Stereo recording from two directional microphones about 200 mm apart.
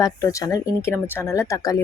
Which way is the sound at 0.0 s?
15° left (ahead or behind).